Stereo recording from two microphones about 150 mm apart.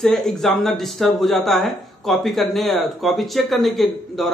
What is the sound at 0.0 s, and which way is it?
Speech, centre (ahead or behind).